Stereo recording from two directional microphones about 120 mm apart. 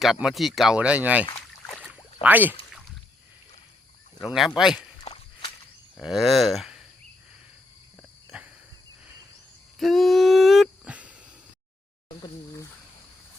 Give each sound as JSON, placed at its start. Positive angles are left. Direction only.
{"t": 0.0, "sound": "speech", "side_deg": -5}
{"t": 1.6, "sound": "boat", "side_deg": 5}
{"t": 2.2, "sound": "speech", "side_deg": -15}
{"t": 4.2, "sound": "speech", "side_deg": 0}
{"t": 5.0, "sound": "walk", "side_deg": 50}
{"t": 6.0, "sound": "speech", "side_deg": 0}
{"t": 9.7, "sound": "a sound", "side_deg": 0}
{"t": 10.8, "sound": "a sound", "side_deg": -10}